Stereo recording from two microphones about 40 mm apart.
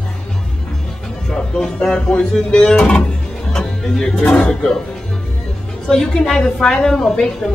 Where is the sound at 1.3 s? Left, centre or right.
Centre.